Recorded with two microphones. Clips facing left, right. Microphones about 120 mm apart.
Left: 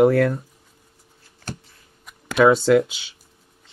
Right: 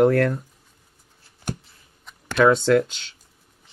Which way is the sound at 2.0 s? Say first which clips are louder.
Left 2 dB; 5° left (ahead or behind).